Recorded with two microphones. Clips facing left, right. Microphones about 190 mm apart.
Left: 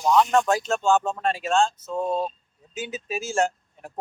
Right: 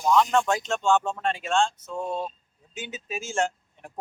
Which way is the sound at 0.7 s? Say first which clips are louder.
Left 2 dB; 40° left (ahead or behind).